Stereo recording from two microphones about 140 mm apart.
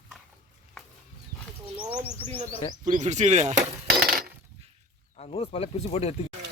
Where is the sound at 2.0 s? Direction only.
15° left (ahead or behind).